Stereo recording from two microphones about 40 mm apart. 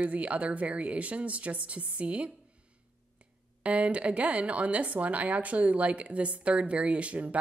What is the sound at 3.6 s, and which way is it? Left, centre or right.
Speech, right.